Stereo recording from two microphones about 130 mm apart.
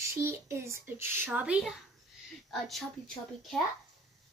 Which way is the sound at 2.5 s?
Centre (ahead or behind).